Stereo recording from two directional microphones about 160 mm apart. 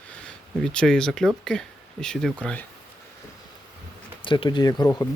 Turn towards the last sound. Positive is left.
turn(degrees=25)  # may be behind; listen again after turning